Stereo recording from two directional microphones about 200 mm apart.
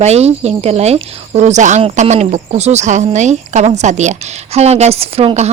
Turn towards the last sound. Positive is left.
turn(degrees=-30)  # may be behind; listen again after turning